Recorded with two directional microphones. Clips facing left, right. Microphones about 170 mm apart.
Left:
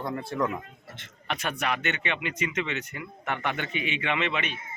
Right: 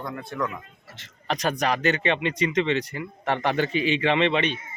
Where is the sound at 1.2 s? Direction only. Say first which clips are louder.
Right 5 dB; 35° right (ahead or behind).